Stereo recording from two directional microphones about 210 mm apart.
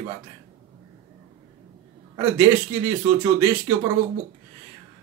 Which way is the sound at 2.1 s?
20° right (ahead or behind).